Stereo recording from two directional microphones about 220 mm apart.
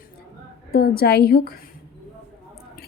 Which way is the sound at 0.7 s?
45° left (ahead or behind).